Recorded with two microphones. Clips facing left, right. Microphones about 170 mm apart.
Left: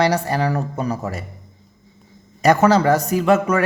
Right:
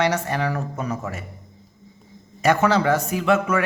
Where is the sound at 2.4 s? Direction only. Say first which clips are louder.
Left 4 dB; 40° left (ahead or behind).